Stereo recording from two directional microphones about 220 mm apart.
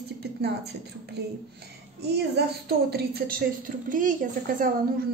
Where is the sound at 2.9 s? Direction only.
45° right (ahead or behind).